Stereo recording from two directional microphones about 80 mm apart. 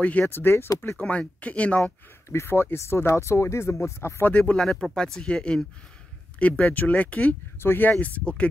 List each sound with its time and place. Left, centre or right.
0.0 s speech: left
0.9 s speech: centre
2.2 s speech: left
4.2 s speech: centre